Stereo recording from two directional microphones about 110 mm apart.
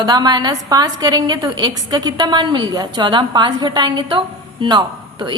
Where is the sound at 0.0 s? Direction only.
40° right (ahead or behind).